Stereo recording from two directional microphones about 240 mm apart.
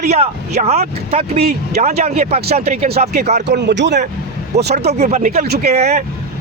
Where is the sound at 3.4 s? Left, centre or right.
Right.